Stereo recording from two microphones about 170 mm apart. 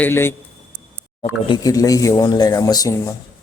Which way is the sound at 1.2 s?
25° left (ahead or behind).